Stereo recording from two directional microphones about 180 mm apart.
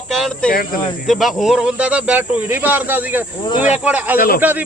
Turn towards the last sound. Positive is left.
turn(degrees=-10)  # may be behind; listen again after turning